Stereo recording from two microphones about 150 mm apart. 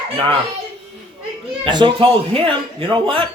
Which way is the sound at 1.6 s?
30° right (ahead or behind).